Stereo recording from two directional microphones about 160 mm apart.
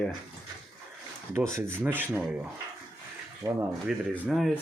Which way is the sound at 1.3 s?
10° right (ahead or behind).